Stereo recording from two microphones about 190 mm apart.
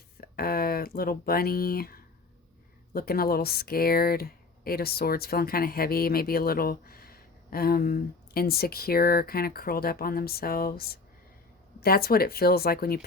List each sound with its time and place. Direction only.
0.2 s speech: 50° left (ahead or behind)